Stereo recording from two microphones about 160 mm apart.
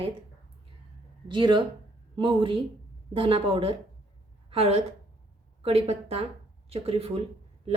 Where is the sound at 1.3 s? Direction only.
30° right (ahead or behind).